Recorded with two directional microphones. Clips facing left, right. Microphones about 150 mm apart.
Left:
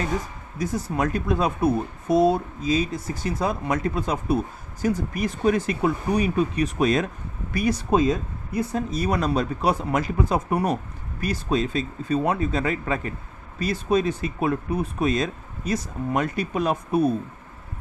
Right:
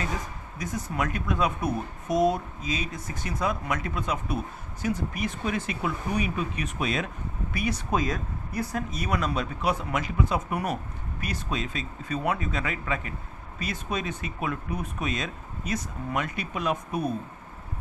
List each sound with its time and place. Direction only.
0.6 s speech: 35° left (ahead or behind)